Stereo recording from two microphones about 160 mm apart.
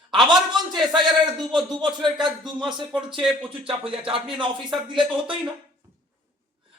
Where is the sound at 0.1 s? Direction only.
30° right (ahead or behind).